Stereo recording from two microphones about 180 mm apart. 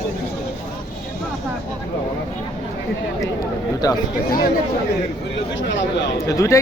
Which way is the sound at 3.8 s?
20° left (ahead or behind).